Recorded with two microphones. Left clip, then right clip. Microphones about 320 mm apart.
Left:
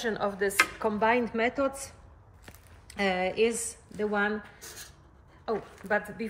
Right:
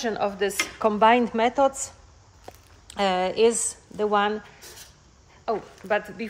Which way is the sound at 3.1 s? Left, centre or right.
Centre.